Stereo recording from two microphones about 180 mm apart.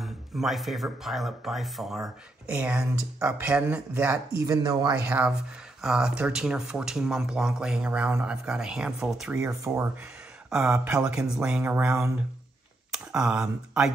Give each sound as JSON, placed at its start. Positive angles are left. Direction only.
{"t": 0.0, "sound": "speech", "side_deg": 0}
{"t": 5.8, "sound": "speech", "side_deg": -5}